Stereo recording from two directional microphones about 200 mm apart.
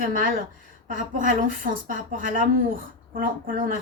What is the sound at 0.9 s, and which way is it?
A woman's voice, 40° right (ahead or behind).